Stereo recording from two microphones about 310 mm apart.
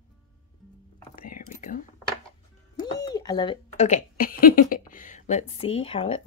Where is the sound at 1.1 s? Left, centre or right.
Left.